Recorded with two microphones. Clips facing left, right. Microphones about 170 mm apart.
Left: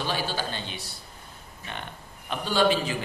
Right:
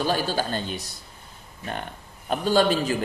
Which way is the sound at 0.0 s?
45° right (ahead or behind).